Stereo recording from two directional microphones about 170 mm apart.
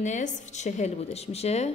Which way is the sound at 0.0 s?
45° left (ahead or behind).